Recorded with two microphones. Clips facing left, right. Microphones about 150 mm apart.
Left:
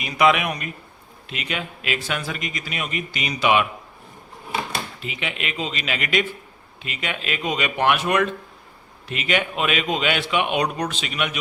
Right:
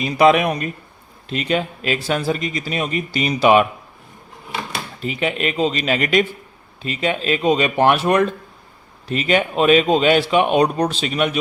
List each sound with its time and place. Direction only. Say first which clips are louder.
0.0 s speech: right 5 dB; 35° right (ahead or behind)
4.9 s speech: right 8 dB; 40° right (ahead or behind)